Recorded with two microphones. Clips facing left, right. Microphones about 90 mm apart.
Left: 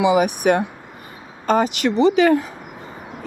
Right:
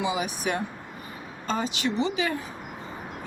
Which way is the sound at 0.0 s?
65° left (ahead or behind).